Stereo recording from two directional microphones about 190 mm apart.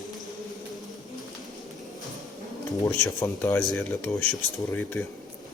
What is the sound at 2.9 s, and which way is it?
Speech, 10° left (ahead or behind).